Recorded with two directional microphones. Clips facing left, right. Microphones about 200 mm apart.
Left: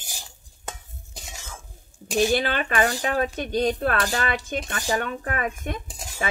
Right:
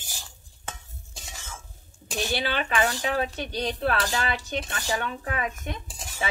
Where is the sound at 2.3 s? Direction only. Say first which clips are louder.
Left 3 dB; 45° left (ahead or behind).